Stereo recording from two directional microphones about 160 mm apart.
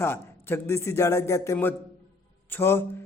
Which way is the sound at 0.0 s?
15° left (ahead or behind).